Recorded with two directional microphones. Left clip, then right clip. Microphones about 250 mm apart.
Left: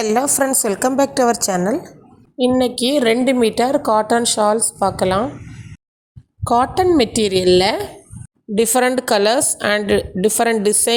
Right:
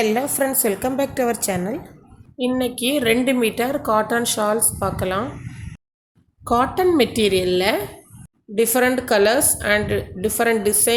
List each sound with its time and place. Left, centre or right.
0.0 s a woman's voice: left
6.4 s a woman's voice: left